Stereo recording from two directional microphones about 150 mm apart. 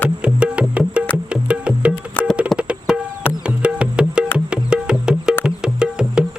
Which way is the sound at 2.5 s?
5° right (ahead or behind).